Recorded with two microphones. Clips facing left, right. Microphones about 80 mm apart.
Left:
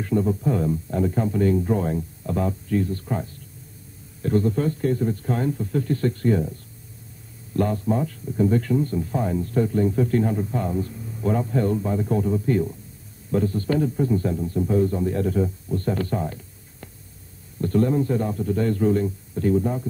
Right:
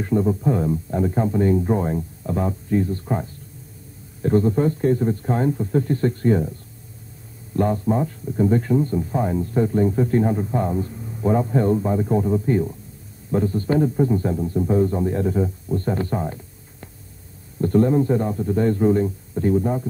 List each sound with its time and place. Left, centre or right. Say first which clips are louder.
0.0 s a man's voice: right 2 dB; centre
7.5 s a man's voice: right 2 dB; right
17.6 s a man's voice: right 3 dB; right